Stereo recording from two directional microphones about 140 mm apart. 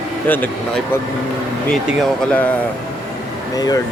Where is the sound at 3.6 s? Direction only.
30° left (ahead or behind).